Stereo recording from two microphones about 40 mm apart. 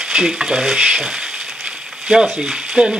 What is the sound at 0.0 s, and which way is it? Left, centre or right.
Frying, centre.